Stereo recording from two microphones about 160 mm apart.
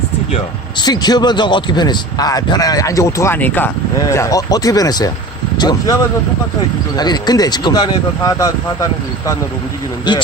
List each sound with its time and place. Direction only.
0.3 s a man's voice: 25° left (ahead or behind)